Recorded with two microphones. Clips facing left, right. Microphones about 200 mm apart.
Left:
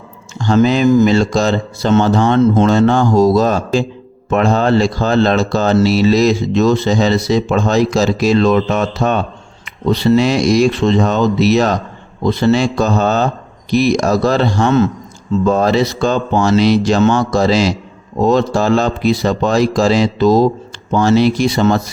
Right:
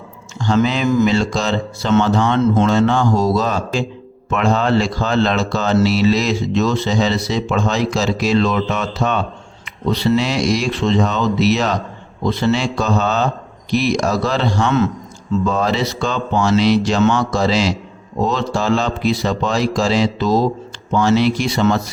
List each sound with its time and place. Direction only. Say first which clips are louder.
0.4 s speech: left 5 dB; 45° left (ahead or behind)